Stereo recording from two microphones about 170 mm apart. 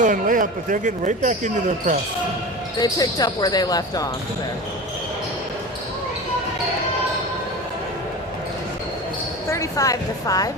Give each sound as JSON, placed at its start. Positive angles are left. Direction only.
{"t": 0.0, "sound": "speech", "side_deg": -50}
{"t": 2.8, "sound": "speech", "side_deg": 20}
{"t": 9.5, "sound": "speech", "side_deg": 20}